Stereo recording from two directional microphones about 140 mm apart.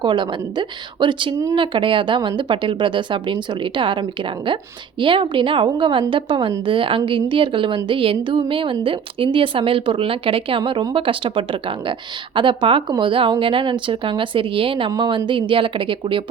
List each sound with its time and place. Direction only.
0.0 s a woman's voice: 35° right (ahead or behind)